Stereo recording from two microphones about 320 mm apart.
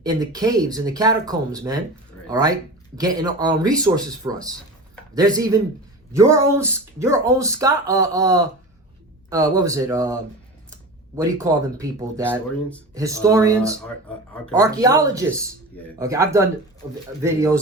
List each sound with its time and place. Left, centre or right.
0.0 s speech: centre
11.2 s speech: centre